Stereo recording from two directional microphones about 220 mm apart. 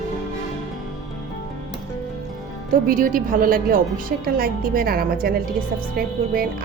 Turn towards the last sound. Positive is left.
turn(degrees=-35)  # may be behind; listen again after turning